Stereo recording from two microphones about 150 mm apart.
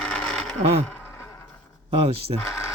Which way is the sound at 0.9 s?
15° left (ahead or behind).